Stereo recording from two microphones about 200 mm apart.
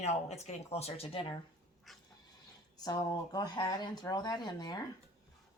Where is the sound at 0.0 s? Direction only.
35° left (ahead or behind).